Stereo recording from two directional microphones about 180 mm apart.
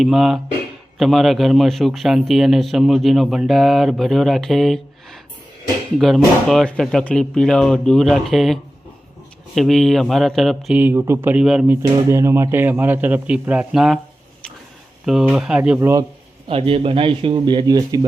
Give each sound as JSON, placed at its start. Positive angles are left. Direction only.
{"t": 0.0, "sound": "a man's voice", "side_deg": 0}
{"t": 9.6, "sound": "a man's voice", "side_deg": 0}
{"t": 11.8, "sound": "a man's voice", "side_deg": -15}
{"t": 15.0, "sound": "a man's voice", "side_deg": 0}
{"t": 16.5, "sound": "speech", "side_deg": -30}